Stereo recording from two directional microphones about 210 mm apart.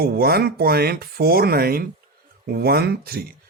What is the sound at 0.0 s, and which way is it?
Speech, 50° right (ahead or behind).